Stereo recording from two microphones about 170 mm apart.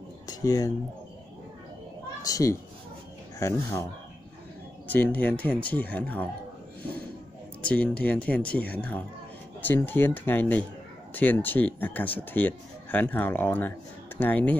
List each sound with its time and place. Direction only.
0.3 s speech: 20° left (ahead or behind)
2.2 s speech: 20° left (ahead or behind)
4.8 s speech: 10° left (ahead or behind)
7.6 s speech: 10° left (ahead or behind)